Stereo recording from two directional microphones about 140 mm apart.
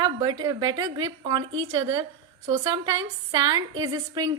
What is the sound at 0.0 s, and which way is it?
A woman's voice, 30° right (ahead or behind).